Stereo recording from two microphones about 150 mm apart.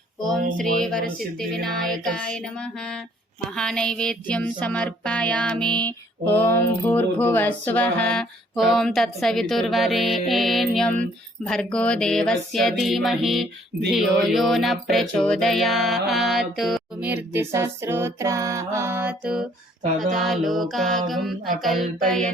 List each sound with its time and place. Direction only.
0.2 s a sound: centre (ahead or behind)
0.5 s music: 5° left (ahead or behind)
17.0 s music: 10° right (ahead or behind)